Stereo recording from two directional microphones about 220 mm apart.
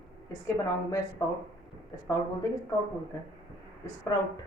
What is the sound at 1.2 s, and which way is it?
Speech, 15° left (ahead or behind).